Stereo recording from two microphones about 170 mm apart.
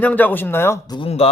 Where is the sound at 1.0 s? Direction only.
35° left (ahead or behind).